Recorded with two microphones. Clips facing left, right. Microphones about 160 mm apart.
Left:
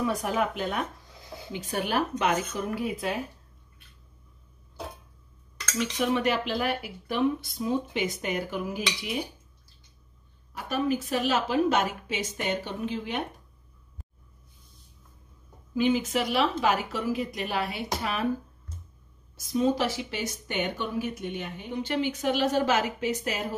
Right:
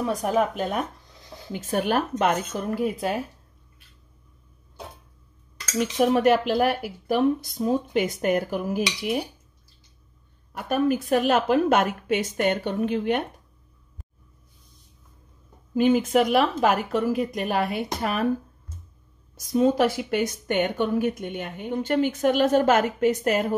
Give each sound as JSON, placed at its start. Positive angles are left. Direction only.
{"t": 0.2, "sound": "a woman's voice", "side_deg": -40}
{"t": 5.8, "sound": "a woman's voice", "side_deg": -50}
{"t": 10.5, "sound": "a woman's voice", "side_deg": -55}
{"t": 15.7, "sound": "a woman's voice", "side_deg": -50}
{"t": 19.4, "sound": "a woman's voice", "side_deg": -50}